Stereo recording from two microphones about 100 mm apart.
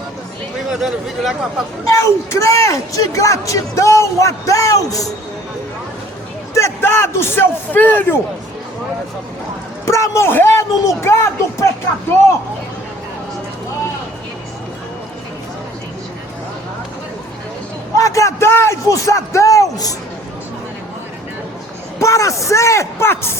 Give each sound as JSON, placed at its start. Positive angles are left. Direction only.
{"t": 0.7, "sound": "speech", "side_deg": -5}
{"t": 1.9, "sound": "a man's voice", "side_deg": 30}
{"t": 6.8, "sound": "a man's voice", "side_deg": 25}
{"t": 9.8, "sound": "a man's voice", "side_deg": 30}
{"t": 17.9, "sound": "a man's voice", "side_deg": 35}
{"t": 21.9, "sound": "a man's voice", "side_deg": 30}